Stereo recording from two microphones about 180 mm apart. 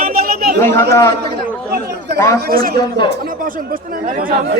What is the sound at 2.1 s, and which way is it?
Speech, 15° left (ahead or behind).